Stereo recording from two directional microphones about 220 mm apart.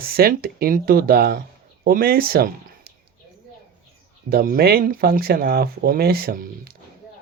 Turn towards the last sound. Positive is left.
turn(degrees=-45)  # may be behind; listen again after turning